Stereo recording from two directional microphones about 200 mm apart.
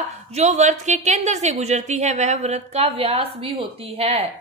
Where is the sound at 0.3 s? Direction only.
35° right (ahead or behind).